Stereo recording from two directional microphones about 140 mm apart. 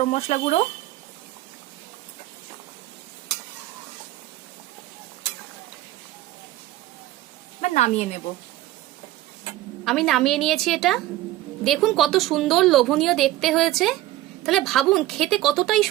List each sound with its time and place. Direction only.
0.0 s speech: 55° left (ahead or behind)
7.6 s a woman's voice: 55° left (ahead or behind)
9.8 s a woman's voice: centre (ahead or behind)